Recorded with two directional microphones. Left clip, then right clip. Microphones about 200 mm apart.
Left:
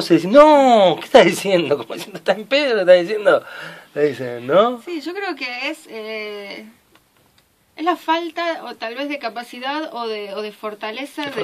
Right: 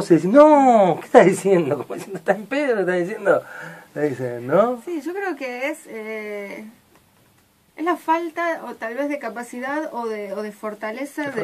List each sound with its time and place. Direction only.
0.0 s speech: 45° left (ahead or behind)
5.1 s speech: 15° left (ahead or behind)
7.7 s speech: 15° left (ahead or behind)